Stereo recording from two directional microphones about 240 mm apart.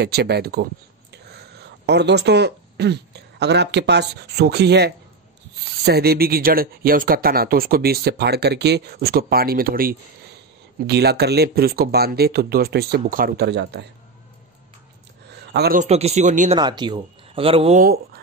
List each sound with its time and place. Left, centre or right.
0.0 s speech: right
15.4 s speech: right
16.5 s speech: centre
17.8 s speech: right